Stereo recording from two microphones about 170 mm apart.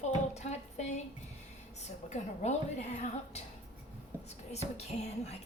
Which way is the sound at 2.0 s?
40° left (ahead or behind).